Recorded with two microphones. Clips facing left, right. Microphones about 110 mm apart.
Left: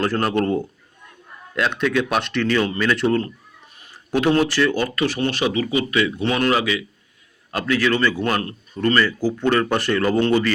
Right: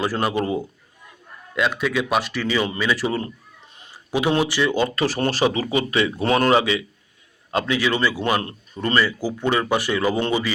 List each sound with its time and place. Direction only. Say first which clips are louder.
0.0 s speech: left 2 dB; 5° right (ahead or behind)
5.0 s speech: even; 35° right (ahead or behind); by 8.4 s 10° right (ahead or behind)
8.4 s speech: left 3 dB; 20° right (ahead or behind)